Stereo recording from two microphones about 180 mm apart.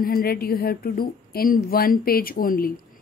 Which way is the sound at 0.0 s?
55° left (ahead or behind).